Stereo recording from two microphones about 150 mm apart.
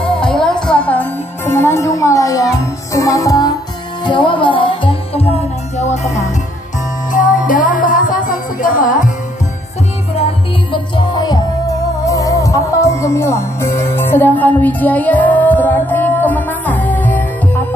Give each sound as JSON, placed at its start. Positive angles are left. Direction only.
{"t": 0.0, "sound": "music", "side_deg": 5}
{"t": 7.1, "sound": "music", "side_deg": 60}
{"t": 10.2, "sound": "music", "side_deg": 35}